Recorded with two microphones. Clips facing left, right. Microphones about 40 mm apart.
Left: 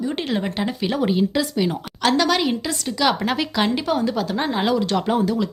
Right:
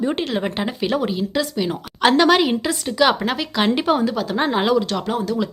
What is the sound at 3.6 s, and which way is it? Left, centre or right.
Speech, centre.